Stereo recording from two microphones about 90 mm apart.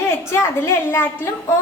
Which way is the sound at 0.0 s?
30° left (ahead or behind).